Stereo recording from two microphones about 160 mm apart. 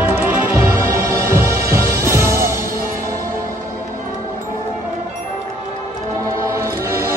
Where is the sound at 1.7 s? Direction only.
15° right (ahead or behind).